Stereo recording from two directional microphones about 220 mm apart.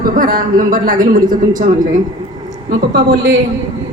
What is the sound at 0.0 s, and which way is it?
A man's voice, 40° right (ahead or behind).